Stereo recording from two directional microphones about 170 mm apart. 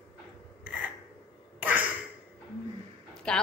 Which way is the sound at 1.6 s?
10° right (ahead or behind).